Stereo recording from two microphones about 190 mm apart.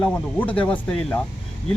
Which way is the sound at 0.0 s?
10° left (ahead or behind).